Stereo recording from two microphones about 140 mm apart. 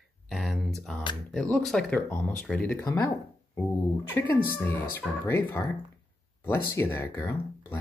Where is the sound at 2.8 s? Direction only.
20° left (ahead or behind).